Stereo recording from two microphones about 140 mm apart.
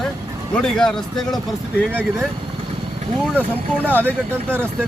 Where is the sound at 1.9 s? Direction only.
15° right (ahead or behind).